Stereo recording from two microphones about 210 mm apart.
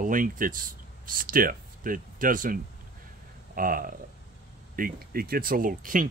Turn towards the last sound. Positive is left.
turn(degrees=-40)  # may be behind; listen again after turning